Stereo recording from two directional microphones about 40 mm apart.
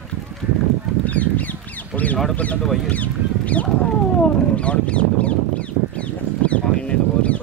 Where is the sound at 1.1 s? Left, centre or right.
Left.